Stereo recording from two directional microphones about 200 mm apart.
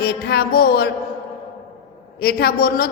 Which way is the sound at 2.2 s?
50° left (ahead or behind).